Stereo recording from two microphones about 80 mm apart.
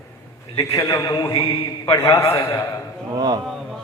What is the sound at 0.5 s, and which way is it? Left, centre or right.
A man's voice, left.